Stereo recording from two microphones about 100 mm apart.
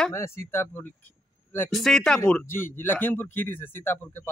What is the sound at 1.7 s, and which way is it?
Speech, 5° left (ahead or behind).